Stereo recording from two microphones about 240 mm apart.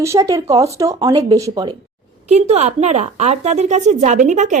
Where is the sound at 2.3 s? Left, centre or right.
Right.